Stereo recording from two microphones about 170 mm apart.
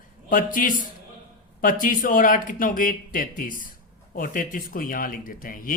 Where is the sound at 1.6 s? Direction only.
55° left (ahead or behind).